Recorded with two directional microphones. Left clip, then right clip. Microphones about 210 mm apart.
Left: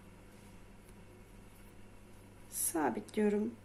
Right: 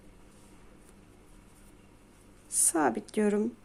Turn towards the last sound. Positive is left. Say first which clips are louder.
# right 5 dB
turn(degrees=-30)  # may be behind; listen again after turning